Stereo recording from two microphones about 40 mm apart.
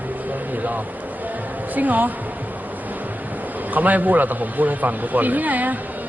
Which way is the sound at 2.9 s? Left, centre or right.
Right.